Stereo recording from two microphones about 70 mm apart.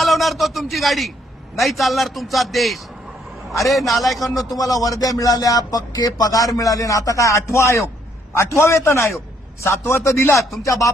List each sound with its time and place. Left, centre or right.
0.0 s a man's voice: centre
4.9 s a man's voice: left
10.6 s a sound: left